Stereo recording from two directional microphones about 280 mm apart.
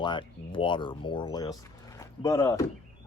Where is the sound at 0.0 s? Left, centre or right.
Centre.